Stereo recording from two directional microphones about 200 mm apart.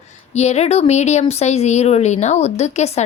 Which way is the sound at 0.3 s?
35° left (ahead or behind).